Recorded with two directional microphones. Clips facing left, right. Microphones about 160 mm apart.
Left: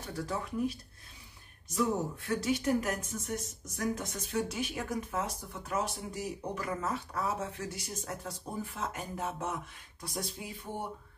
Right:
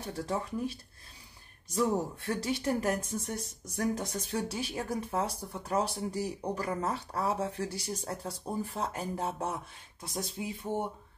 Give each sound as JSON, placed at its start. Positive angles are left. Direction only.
{"t": 0.1, "sound": "speech", "side_deg": -25}